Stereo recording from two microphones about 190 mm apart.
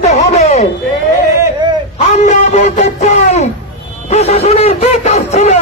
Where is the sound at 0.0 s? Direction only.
35° left (ahead or behind).